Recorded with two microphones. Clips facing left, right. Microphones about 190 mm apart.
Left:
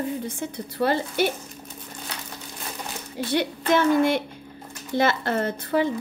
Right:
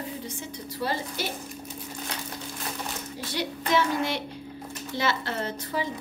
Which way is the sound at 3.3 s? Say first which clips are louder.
Left 4 dB; 55° left (ahead or behind).